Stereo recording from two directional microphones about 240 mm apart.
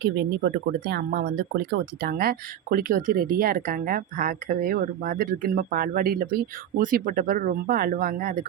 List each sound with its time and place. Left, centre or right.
0.0 s speech: right